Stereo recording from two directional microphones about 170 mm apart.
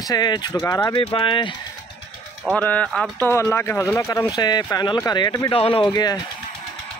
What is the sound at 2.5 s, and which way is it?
Speech, 10° left (ahead or behind).